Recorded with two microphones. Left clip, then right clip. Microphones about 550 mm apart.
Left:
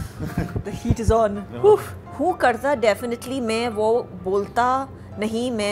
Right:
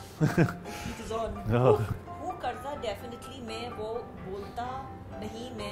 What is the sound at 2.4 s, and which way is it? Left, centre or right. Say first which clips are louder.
A woman's voice: left 17 dB; left.